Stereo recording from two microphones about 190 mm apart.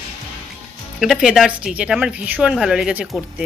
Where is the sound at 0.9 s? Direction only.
Centre (ahead or behind).